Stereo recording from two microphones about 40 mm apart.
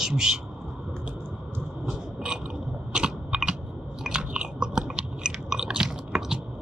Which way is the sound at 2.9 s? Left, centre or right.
Right.